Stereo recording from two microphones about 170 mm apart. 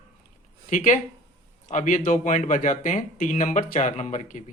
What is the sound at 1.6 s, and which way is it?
Speech, 50° left (ahead or behind).